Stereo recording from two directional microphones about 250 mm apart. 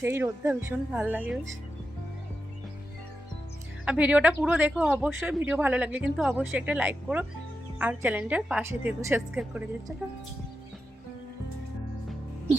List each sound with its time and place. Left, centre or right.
0.0 s a woman's voice: centre
3.8 s a woman's voice: centre